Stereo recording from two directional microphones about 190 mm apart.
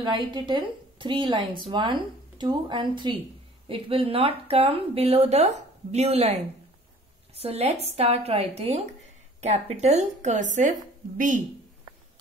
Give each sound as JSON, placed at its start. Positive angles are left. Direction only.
{"t": 0.0, "sound": "a woman's voice", "side_deg": -25}